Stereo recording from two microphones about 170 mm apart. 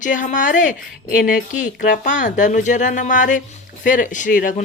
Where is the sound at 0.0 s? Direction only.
50° left (ahead or behind).